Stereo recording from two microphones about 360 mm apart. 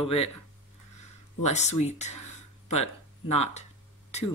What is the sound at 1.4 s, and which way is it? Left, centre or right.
Speech, centre.